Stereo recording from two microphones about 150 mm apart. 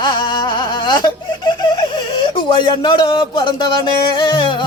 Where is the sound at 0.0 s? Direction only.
30° left (ahead or behind).